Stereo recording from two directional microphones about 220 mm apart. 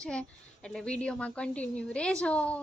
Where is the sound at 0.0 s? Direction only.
5° left (ahead or behind).